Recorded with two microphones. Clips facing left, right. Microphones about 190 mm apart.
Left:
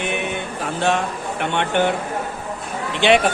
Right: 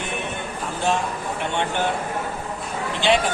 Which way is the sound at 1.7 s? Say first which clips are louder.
Left 8 dB; 70° left (ahead or behind).